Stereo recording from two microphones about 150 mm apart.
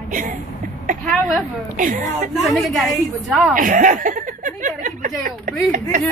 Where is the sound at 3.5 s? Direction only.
65° right (ahead or behind).